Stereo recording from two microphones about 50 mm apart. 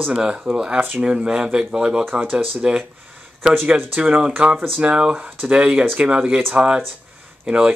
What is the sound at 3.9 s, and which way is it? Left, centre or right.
Speech, right.